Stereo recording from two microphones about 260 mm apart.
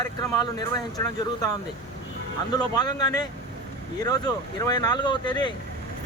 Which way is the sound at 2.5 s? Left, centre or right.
Centre.